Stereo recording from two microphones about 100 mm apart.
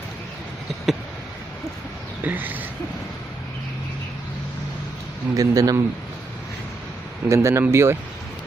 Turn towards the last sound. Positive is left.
turn(degrees=-25)  # may be behind; listen again after turning